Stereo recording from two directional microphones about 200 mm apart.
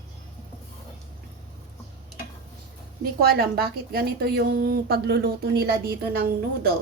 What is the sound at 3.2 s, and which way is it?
A woman's voice, 50° right (ahead or behind).